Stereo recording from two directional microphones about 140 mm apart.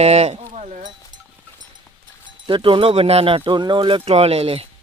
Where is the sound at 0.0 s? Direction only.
50° right (ahead or behind).